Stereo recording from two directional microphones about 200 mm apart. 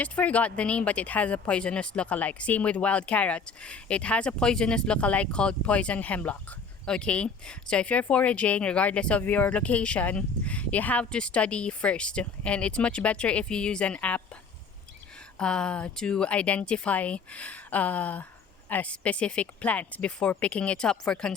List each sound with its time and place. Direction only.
0.0 s speech: 5° left (ahead or behind)
15.4 s speech: 5° left (ahead or behind)